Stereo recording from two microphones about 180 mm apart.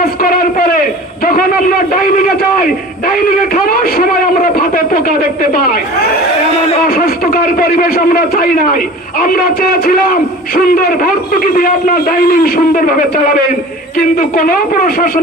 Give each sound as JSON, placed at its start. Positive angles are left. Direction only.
{"t": 0.0, "sound": "a man's voice", "side_deg": 55}
{"t": 3.5, "sound": "a man's voice", "side_deg": 55}
{"t": 6.9, "sound": "a man's voice", "side_deg": 55}